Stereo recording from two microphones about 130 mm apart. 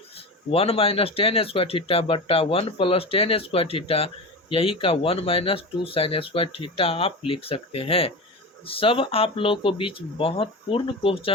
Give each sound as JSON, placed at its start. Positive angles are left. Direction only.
{"t": 0.5, "sound": "speech", "side_deg": 45}